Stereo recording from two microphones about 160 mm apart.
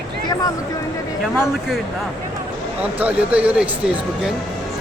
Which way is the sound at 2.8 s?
10° right (ahead or behind).